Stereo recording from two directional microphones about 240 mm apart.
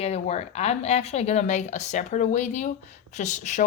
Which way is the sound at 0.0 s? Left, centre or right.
Left.